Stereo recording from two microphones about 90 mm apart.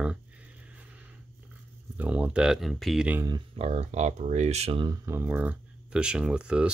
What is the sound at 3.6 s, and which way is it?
Speech, 90° right.